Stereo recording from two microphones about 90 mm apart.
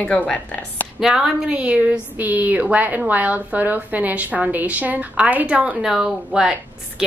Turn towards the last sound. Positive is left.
turn(degrees=-5)  # may be behind; listen again after turning